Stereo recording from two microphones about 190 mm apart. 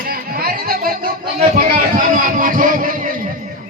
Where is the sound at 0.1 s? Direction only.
50° right (ahead or behind).